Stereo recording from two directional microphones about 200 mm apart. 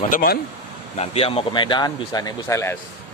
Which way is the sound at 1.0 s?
30° left (ahead or behind).